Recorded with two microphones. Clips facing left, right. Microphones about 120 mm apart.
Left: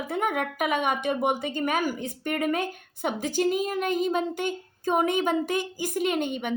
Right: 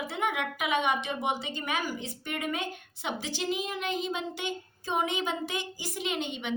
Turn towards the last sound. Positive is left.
turn(degrees=45)  # may be behind; listen again after turning